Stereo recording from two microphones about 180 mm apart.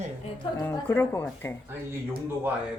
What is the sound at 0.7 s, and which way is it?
Speech, 15° left (ahead or behind).